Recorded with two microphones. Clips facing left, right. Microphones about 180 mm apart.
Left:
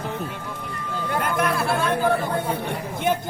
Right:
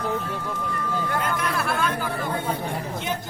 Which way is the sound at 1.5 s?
30° left (ahead or behind).